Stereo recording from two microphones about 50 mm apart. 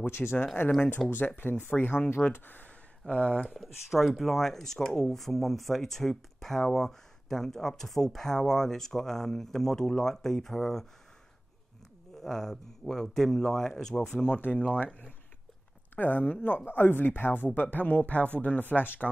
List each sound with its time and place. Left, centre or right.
0.0 s speech: left
0.7 s speech: left
3.1 s speech: left
3.4 s speech: centre
12.2 s speech: centre
14.1 s speech: left
16.0 s speech: left